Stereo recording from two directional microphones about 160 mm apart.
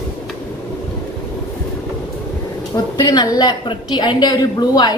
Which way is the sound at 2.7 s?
25° left (ahead or behind).